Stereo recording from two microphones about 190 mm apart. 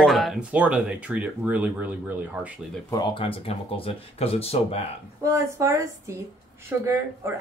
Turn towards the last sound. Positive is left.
turn(degrees=-15)  # may be behind; listen again after turning